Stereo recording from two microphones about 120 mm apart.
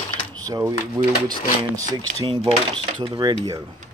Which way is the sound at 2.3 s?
45° right (ahead or behind).